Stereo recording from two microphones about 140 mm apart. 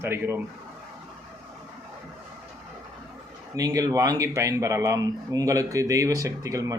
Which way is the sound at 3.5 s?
25° right (ahead or behind).